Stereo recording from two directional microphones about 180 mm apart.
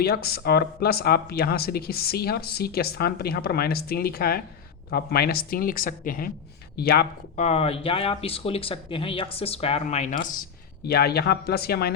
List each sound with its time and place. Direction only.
0.0 s speech: 60° left (ahead or behind)
7.3 s speech: 35° left (ahead or behind)
10.8 s speech: 60° left (ahead or behind)